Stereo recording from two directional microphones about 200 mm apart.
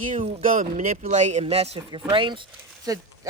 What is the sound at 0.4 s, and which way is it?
Speech, 40° right (ahead or behind).